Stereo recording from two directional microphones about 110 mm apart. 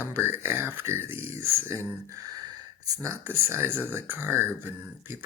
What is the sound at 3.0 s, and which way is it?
Speech, 25° right (ahead or behind).